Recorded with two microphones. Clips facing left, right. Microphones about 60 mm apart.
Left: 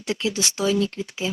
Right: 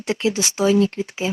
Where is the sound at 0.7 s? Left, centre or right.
Right.